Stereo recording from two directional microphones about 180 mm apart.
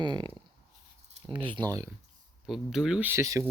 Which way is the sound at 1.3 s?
30° right (ahead or behind).